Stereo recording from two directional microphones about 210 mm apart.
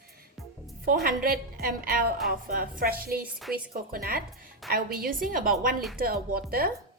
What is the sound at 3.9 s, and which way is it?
A woman's voice, 45° right (ahead or behind).